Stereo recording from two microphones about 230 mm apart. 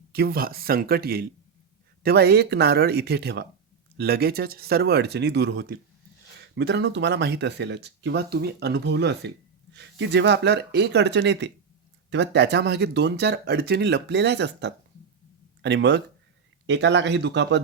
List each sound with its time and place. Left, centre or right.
0.1 s speech: right